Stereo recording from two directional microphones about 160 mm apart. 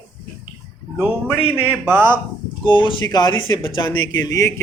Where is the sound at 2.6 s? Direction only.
30° left (ahead or behind).